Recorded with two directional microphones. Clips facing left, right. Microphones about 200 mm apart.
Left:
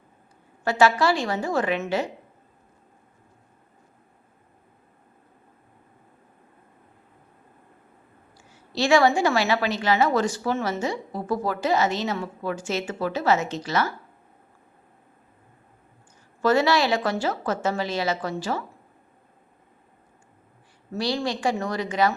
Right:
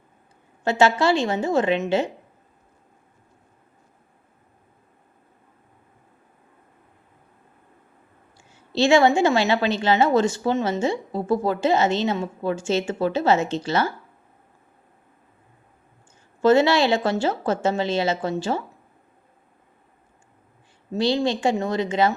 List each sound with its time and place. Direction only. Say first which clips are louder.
0.6 s a woman's voice: right 1 dB; 25° right (ahead or behind)
8.4 s a woman's voice: right 3 dB; 25° right (ahead or behind)
16.4 s a woman's voice: right 4 dB; 25° right (ahead or behind)
20.9 s a woman's voice: right 5 dB; 20° right (ahead or behind)